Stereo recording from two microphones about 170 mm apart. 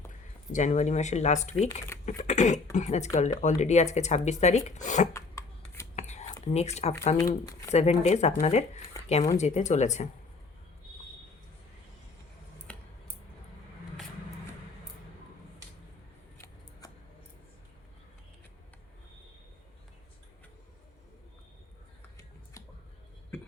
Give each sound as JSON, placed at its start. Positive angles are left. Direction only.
{"t": 0.5, "sound": "speech", "side_deg": 45}
{"t": 5.1, "sound": "shuffling cards", "side_deg": 15}
{"t": 6.0, "sound": "a sound", "side_deg": 40}
{"t": 6.4, "sound": "speech", "side_deg": 40}
{"t": 12.7, "sound": "a sound", "side_deg": 5}
{"t": 16.8, "sound": "scissors", "side_deg": 20}